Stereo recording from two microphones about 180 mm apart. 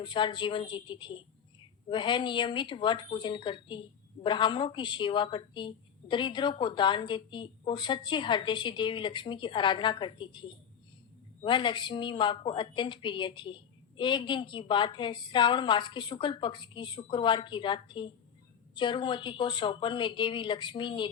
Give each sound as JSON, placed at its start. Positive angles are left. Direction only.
{"t": 0.0, "sound": "a woman's voice", "side_deg": 25}
{"t": 11.4, "sound": "a woman's voice", "side_deg": 25}